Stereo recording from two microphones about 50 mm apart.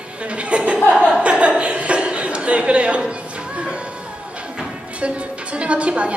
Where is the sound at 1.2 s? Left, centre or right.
Right.